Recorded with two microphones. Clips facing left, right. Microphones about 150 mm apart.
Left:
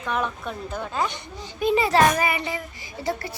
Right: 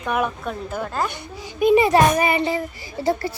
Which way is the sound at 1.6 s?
15° right (ahead or behind).